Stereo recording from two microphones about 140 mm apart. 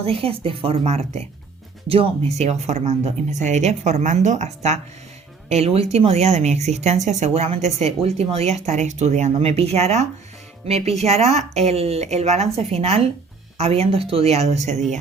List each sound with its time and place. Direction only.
0.0 s speech: 45° right (ahead or behind)